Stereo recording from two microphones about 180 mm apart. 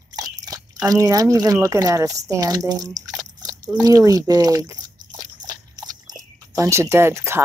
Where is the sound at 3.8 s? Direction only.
20° right (ahead or behind).